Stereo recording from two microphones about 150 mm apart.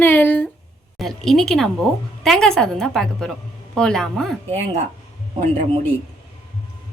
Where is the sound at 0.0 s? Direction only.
15° left (ahead or behind).